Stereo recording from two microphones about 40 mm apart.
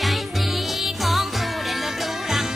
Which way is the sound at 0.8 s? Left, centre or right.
Centre.